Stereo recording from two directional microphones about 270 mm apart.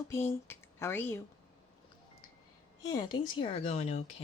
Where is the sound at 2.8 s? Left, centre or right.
Centre.